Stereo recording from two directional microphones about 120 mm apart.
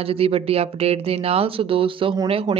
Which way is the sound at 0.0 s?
55° right (ahead or behind).